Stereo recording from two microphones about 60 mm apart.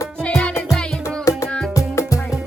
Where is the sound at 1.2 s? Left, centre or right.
Left.